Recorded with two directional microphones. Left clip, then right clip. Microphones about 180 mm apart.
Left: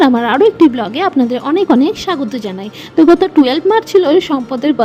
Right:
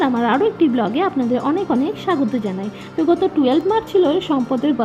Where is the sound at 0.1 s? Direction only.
55° left (ahead or behind).